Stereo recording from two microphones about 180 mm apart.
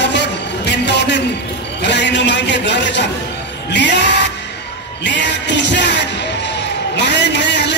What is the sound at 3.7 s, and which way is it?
Music, 80° left.